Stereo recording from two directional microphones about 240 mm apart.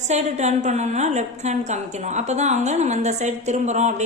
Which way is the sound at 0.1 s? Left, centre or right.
Right.